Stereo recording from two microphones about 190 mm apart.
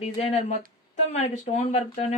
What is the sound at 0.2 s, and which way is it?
Speech, 35° left (ahead or behind).